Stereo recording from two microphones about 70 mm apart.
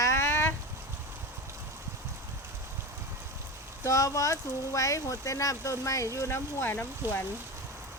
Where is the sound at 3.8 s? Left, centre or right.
Left.